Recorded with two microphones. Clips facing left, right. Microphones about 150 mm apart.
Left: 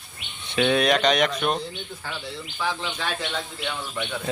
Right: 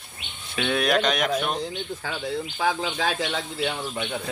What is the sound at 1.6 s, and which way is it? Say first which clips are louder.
Speech: right 4 dB; 45° right (ahead or behind).